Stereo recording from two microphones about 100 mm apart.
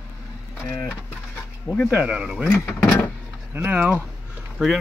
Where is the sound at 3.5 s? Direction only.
15° right (ahead or behind).